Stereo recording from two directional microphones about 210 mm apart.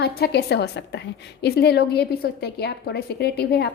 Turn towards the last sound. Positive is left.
turn(degrees=50)  # may be behind; listen again after turning